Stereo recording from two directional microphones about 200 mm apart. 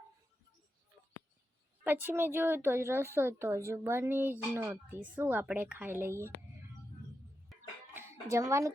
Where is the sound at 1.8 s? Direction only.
10° right (ahead or behind).